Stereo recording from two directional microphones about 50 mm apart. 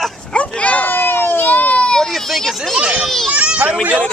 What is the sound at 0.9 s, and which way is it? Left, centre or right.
Baby cry, left.